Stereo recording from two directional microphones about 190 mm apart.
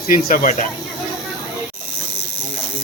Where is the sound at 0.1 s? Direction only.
45° left (ahead or behind).